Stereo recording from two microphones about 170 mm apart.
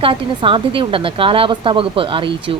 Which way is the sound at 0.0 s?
30° right (ahead or behind).